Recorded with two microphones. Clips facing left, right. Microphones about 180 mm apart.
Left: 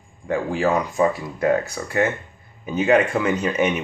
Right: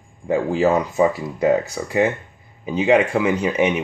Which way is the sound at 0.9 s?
10° right (ahead or behind).